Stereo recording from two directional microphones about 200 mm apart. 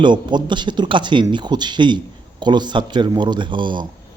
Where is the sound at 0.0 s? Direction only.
20° right (ahead or behind).